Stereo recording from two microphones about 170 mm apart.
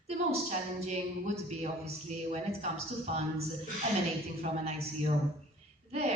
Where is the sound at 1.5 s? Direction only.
40° right (ahead or behind).